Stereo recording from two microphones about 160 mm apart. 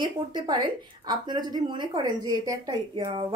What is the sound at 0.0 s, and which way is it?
A woman's voice, 30° right (ahead or behind).